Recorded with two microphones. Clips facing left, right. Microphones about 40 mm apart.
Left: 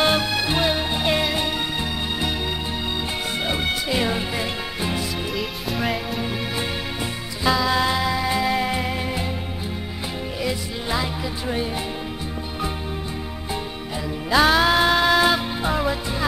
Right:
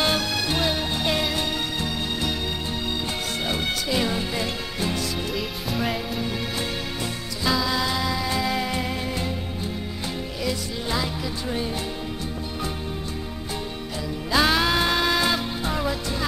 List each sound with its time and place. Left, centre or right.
0.0 s music: centre
3.4 s music: centre
5.3 s music: centre
7.7 s music: centre
10.4 s music: centre
14.3 s music: centre